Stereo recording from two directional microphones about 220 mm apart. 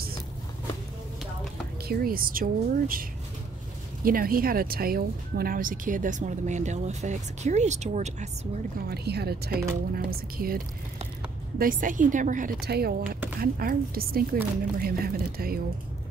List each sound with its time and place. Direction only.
1.9 s speech: 40° right (ahead or behind)
8.8 s speech: 45° right (ahead or behind)